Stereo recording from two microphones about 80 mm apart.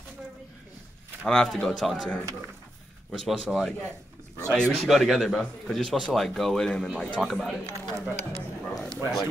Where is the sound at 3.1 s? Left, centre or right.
Centre.